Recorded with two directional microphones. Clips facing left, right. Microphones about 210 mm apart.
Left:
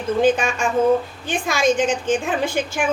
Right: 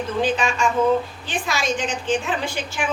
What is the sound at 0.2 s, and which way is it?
A woman's voice, 50° left (ahead or behind).